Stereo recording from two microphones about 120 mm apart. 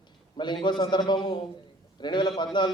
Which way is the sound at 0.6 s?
40° left (ahead or behind).